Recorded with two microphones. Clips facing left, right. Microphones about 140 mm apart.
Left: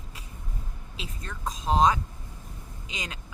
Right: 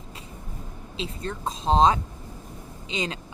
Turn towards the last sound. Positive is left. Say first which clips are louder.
# right 8 dB
turn(degrees=-25)  # may be behind; listen again after turning